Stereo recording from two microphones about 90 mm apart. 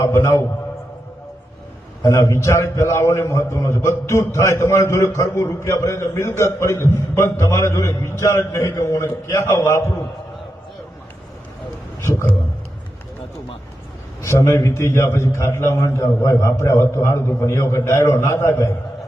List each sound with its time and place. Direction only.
0.0 s a man's voice: 35° left (ahead or behind)
2.0 s a man's voice: 35° left (ahead or behind)
14.2 s a man's voice: 35° left (ahead or behind)